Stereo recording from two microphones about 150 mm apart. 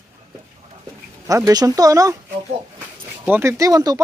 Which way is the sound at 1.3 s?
20° right (ahead or behind).